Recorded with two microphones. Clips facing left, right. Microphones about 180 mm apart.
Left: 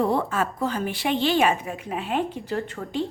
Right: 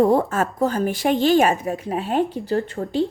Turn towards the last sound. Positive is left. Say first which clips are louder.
# right 6 dB
turn(degrees=-35)  # may be behind; listen again after turning